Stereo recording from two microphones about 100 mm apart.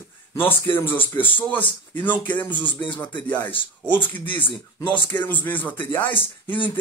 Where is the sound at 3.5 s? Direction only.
55° left (ahead or behind).